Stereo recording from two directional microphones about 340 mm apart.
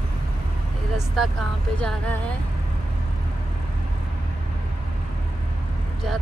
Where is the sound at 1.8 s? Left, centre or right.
Centre.